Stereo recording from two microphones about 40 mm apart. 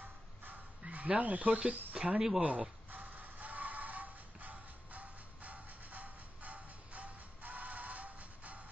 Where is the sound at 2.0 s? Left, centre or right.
Right.